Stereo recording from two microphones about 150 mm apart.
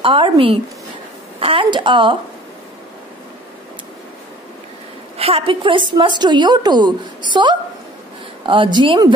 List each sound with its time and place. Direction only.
0.0 s a woman's voice: 35° right (ahead or behind)
5.1 s a woman's voice: 40° right (ahead or behind)